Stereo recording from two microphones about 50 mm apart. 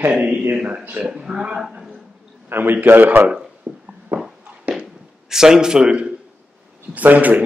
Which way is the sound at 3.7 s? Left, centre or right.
Right.